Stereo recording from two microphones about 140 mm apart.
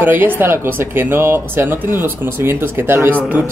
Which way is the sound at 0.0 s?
15° right (ahead or behind).